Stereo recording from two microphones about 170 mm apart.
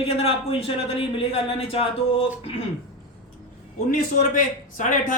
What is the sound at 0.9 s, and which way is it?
A man's voice, 35° left (ahead or behind).